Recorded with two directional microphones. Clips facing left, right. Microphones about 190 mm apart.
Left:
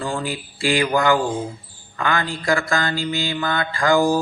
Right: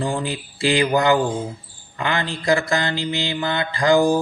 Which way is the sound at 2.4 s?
20° right (ahead or behind).